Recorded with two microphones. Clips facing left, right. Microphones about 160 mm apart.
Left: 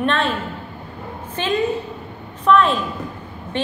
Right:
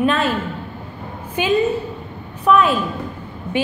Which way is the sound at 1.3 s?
10° right (ahead or behind).